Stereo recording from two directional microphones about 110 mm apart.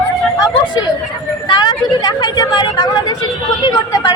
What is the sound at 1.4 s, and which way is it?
Speech, 40° left (ahead or behind).